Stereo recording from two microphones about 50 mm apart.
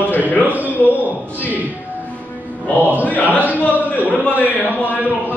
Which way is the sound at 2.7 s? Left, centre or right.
Right.